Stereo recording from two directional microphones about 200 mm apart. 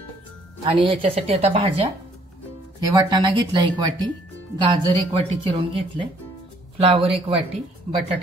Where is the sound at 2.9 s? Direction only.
20° right (ahead or behind).